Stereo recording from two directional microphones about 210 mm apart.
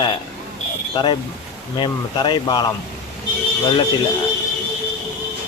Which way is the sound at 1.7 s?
20° left (ahead or behind).